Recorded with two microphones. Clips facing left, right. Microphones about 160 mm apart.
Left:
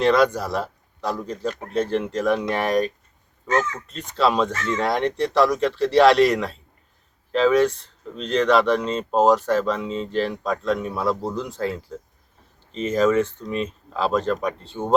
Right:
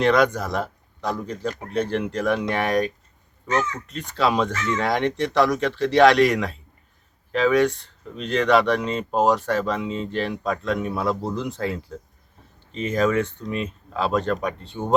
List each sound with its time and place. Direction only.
0.0 s speech: centre (ahead or behind)
3.9 s speech: centre (ahead or behind)
9.8 s speech: 35° left (ahead or behind)
10.1 s speech: centre (ahead or behind)